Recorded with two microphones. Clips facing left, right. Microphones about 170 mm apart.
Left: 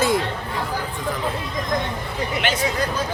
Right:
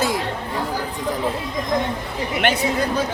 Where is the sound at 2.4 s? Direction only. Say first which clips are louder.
Right 5 dB; 55° right (ahead or behind).